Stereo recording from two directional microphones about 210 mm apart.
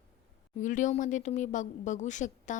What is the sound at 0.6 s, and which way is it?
Speech, 35° left (ahead or behind).